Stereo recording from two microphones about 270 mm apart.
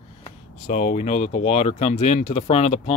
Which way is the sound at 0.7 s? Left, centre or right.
Left.